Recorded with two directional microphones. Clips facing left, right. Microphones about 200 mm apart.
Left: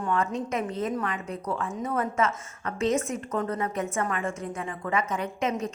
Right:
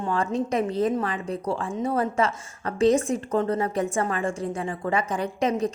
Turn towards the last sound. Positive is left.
turn(degrees=-35)  # may be behind; listen again after turning